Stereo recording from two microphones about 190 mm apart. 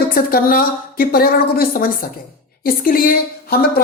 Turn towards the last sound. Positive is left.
turn(degrees=50)  # may be behind; listen again after turning